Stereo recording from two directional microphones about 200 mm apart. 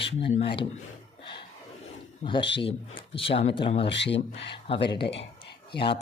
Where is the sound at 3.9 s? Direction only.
60° left (ahead or behind).